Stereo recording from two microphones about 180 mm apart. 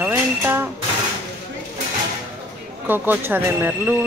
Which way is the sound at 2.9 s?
10° right (ahead or behind).